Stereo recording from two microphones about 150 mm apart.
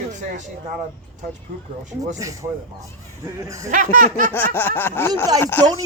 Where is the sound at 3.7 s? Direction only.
60° right (ahead or behind).